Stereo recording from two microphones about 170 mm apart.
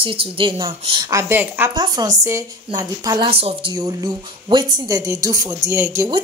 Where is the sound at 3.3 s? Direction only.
35° right (ahead or behind); by 6.1 s 15° right (ahead or behind).